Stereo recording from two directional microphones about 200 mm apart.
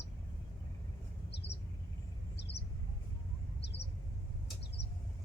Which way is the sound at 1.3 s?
55° left (ahead or behind).